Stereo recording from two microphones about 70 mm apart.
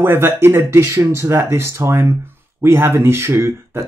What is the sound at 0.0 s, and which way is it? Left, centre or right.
Speech, right.